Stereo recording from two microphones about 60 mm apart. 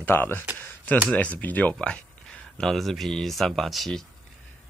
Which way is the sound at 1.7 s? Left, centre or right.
Centre.